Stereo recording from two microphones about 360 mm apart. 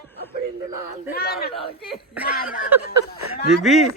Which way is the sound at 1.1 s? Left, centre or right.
Left.